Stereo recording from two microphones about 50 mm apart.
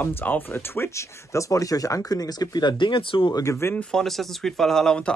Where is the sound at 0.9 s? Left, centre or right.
Left.